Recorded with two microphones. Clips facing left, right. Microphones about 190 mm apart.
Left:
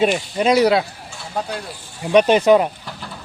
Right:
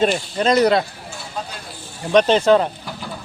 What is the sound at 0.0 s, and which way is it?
Speech, 10° left (ahead or behind).